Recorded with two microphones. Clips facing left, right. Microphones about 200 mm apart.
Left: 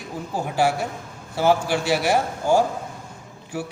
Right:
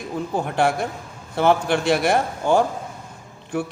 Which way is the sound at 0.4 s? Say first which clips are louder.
Left 1 dB; 5° left (ahead or behind).